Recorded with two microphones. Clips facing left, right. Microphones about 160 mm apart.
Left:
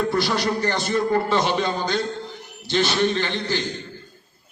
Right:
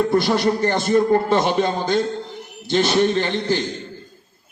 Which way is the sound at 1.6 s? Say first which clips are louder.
Right 4 dB; 25° right (ahead or behind).